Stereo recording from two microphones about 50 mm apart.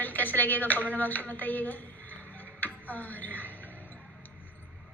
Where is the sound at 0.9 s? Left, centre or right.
Left.